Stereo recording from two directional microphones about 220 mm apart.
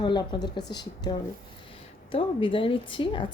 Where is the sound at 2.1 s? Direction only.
25° left (ahead or behind).